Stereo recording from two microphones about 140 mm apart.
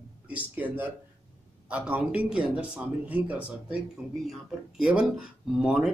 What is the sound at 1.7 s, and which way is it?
A man's voice, 10° right (ahead or behind).